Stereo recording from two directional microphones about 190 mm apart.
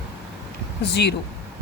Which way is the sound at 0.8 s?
60° left (ahead or behind).